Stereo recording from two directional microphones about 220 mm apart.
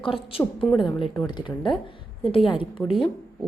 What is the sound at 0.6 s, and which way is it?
Speech, centre (ahead or behind).